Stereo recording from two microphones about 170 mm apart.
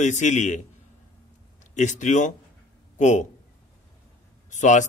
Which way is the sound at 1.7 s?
45° left (ahead or behind).